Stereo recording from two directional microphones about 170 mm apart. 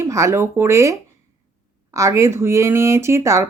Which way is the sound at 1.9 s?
15° right (ahead or behind).